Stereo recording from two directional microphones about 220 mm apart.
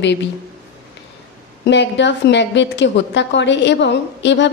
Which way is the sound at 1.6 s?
55° left (ahead or behind).